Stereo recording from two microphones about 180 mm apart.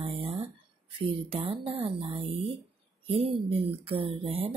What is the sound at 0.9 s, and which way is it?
Speech, 30° right (ahead or behind).